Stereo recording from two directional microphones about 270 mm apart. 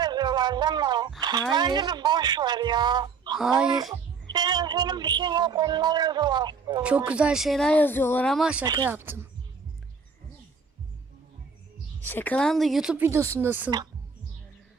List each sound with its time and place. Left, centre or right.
0.0 s a sound: centre
1.2 s a woman's voice: centre
6.8 s speech: centre
8.6 s speech: centre
12.0 s speech: centre